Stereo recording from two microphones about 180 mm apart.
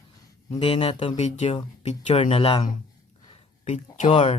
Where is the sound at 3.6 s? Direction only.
45° left (ahead or behind).